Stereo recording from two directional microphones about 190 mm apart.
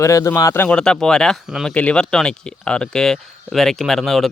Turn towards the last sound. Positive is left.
turn(degrees=0)  # may be behind; listen again after turning